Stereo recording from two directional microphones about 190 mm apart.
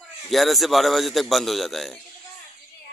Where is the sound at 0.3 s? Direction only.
Centre (ahead or behind).